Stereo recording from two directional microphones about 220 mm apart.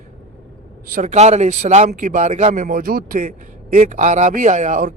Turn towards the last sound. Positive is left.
turn(degrees=-35)  # may be behind; listen again after turning